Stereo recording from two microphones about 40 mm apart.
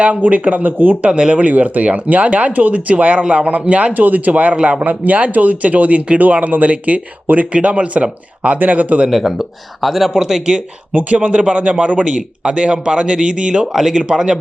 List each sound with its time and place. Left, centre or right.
0.0 s speech: right
1.2 s speech: right
3.9 s speech: right
4.9 s speech: right
9.0 s speech: centre
10.1 s speech: centre
10.9 s speech: right
12.0 s speech: right
13.7 s speech: centre